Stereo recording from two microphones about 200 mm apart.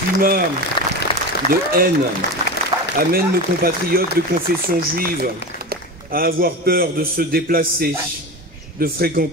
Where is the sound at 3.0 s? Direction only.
50° right (ahead or behind).